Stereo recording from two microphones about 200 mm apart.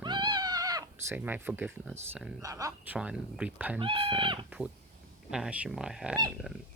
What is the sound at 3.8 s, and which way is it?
Speech, 25° right (ahead or behind).